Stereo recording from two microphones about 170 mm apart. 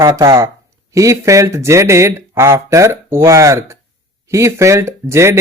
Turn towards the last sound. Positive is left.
turn(degrees=-15)  # may be behind; listen again after turning